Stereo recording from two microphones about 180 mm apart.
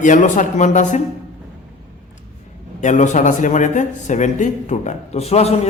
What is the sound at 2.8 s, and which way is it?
A man's voice, 40° left (ahead or behind).